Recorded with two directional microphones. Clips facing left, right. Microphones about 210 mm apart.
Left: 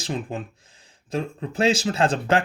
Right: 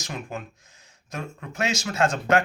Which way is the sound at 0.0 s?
30° left (ahead or behind).